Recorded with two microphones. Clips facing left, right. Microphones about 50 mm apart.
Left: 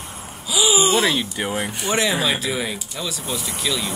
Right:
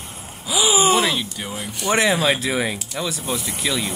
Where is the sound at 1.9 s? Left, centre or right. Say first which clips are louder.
Right 3 dB; right.